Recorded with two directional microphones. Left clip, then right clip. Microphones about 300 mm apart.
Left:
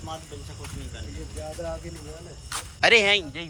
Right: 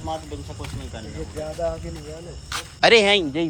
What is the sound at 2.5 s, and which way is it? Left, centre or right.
Speech, centre.